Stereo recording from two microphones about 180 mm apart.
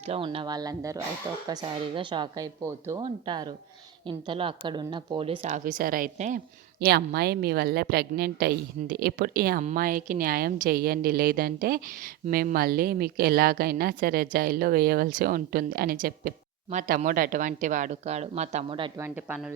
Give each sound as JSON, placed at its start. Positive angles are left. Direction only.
{"t": 0.0, "sound": "speech", "side_deg": -35}
{"t": 0.3, "sound": "a woman's voice", "side_deg": -25}
{"t": 6.7, "sound": "a woman's voice", "side_deg": -60}
{"t": 18.9, "sound": "speech", "side_deg": -15}